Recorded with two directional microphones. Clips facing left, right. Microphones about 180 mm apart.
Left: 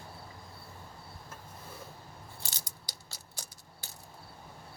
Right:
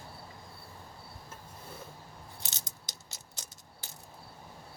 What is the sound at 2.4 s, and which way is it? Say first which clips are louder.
Keys jangling: even; 20° right (ahead or behind).